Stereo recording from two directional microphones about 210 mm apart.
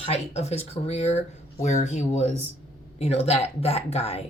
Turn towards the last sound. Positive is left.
turn(degrees=30)  # may be behind; listen again after turning